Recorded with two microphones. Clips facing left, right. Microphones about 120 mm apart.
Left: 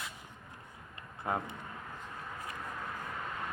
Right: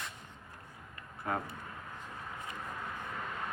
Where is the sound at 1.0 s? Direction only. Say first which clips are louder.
Left 1 dB; 20° left (ahead or behind).